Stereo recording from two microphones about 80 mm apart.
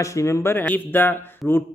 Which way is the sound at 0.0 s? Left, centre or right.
Left.